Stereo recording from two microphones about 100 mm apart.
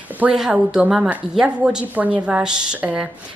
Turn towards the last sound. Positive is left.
turn(degrees=-15)  # may be behind; listen again after turning